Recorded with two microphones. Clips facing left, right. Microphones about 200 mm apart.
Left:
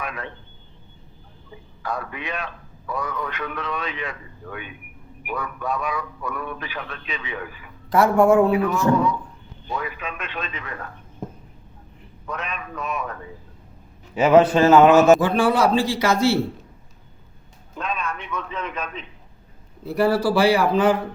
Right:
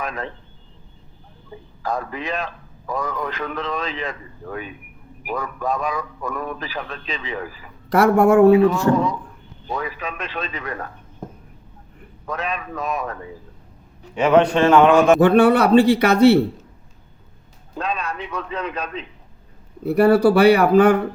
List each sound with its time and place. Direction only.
0.0 s a man's voice: 40° right (ahead or behind)
1.8 s a man's voice: 40° right (ahead or behind)
7.9 s speech: 60° right (ahead or behind)
8.5 s a man's voice: 30° right (ahead or behind)
12.3 s a man's voice: 35° right (ahead or behind)
14.2 s a man's voice: 5° left (ahead or behind)
15.2 s speech: 65° right (ahead or behind)
17.7 s a man's voice: 35° right (ahead or behind)
19.8 s speech: 60° right (ahead or behind)